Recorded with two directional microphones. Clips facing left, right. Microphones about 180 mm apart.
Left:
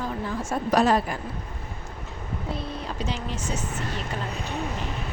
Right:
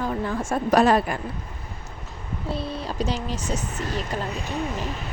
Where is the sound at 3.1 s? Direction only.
40° right (ahead or behind).